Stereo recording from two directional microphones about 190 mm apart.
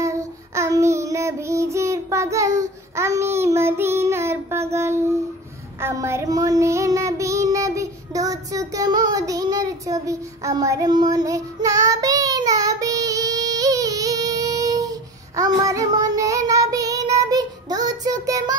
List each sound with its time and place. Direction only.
0.0 s child singing: 15° right (ahead or behind)